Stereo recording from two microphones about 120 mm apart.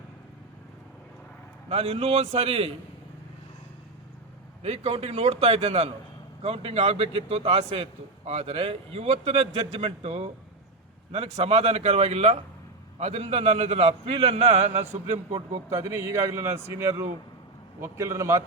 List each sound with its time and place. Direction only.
1.7 s a man's voice: 55° right (ahead or behind)
4.6 s a man's voice: 60° right (ahead or behind)
15.7 s a man's voice: 25° right (ahead or behind)